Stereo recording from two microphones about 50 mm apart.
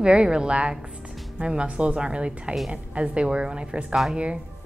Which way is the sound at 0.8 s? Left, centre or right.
Centre.